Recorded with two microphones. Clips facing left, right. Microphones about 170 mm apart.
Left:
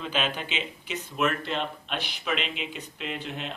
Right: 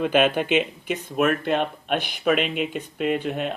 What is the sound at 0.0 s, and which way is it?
Speech, 55° right (ahead or behind).